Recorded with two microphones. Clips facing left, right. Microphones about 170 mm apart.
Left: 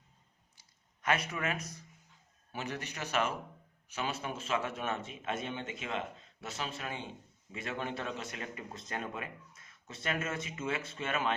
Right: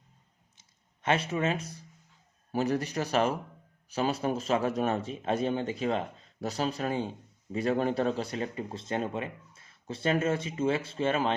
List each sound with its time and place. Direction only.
1.0 s speech: 30° right (ahead or behind)